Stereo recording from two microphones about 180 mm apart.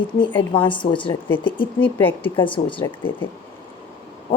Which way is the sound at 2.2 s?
30° left (ahead or behind).